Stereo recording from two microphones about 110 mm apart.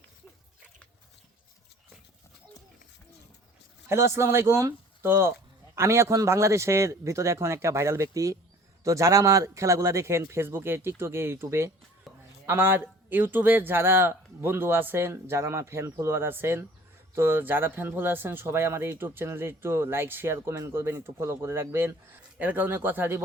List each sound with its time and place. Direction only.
3.8 s speech: 25° right (ahead or behind)
12.1 s a sound: centre (ahead or behind)
12.5 s speech: 20° right (ahead or behind)